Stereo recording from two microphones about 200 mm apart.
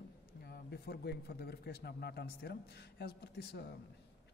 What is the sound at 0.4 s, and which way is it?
A man's voice, 50° left (ahead or behind).